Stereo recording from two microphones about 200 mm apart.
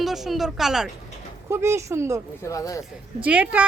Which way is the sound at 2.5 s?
15° left (ahead or behind).